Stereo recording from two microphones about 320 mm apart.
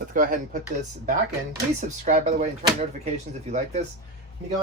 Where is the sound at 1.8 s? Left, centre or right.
Right.